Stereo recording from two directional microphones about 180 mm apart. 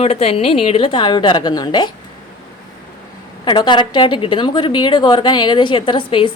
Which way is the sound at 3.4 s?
25° left (ahead or behind).